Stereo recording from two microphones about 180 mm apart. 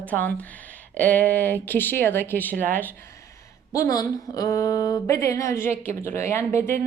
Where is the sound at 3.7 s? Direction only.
20° left (ahead or behind).